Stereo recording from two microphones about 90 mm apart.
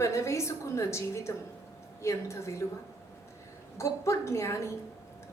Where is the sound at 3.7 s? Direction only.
30° left (ahead or behind).